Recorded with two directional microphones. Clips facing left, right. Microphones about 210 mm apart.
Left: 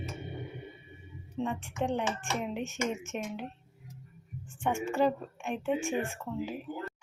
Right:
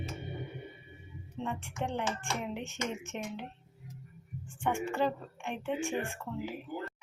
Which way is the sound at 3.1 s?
15° left (ahead or behind).